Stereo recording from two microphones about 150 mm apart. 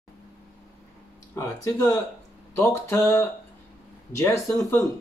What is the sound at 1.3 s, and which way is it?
Speech, 20° left (ahead or behind).